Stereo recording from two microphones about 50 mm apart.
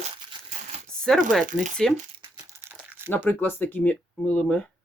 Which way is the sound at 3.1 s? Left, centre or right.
Left.